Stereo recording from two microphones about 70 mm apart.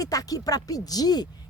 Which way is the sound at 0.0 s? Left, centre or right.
Left.